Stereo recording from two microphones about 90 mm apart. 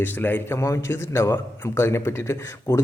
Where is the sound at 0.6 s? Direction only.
30° left (ahead or behind).